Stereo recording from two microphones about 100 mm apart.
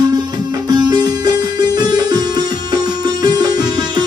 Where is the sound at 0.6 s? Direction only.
40° right (ahead or behind).